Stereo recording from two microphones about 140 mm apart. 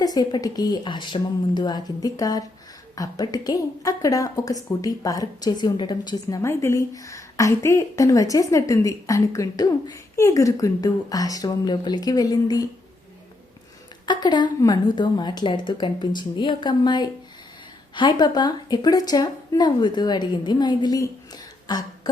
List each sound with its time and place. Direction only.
0.0 s speech: 30° left (ahead or behind)
14.1 s a woman's voice: 30° left (ahead or behind)